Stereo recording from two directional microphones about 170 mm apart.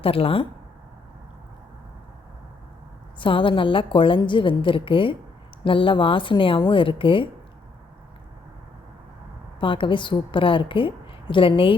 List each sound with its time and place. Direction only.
0.0 s a woman's voice: 35° left (ahead or behind)
3.2 s a woman's voice: 30° left (ahead or behind)
9.6 s a woman's voice: 30° left (ahead or behind)